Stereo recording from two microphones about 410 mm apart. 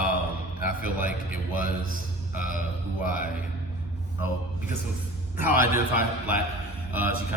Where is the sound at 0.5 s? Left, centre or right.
Left.